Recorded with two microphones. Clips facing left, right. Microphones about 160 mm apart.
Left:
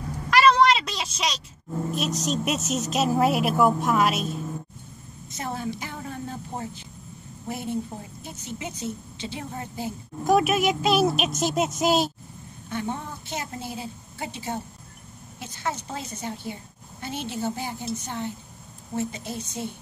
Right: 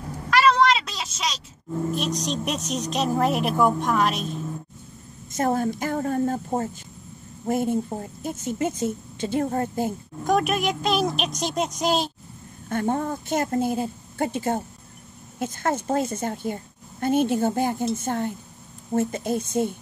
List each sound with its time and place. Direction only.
0.3 s a sound: centre (ahead or behind)
2.0 s a woman's voice: 5° left (ahead or behind)
5.3 s a woman's voice: 50° right (ahead or behind)
10.2 s a woman's voice: 5° left (ahead or behind)
12.6 s a woman's voice: 50° right (ahead or behind)